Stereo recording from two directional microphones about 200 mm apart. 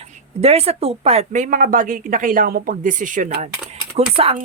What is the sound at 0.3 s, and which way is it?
Speech, 30° right (ahead or behind).